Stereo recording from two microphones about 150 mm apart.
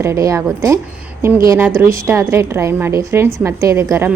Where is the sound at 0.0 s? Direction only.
20° right (ahead or behind).